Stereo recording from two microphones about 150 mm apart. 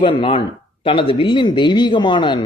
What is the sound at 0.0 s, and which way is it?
Speech, 35° left (ahead or behind).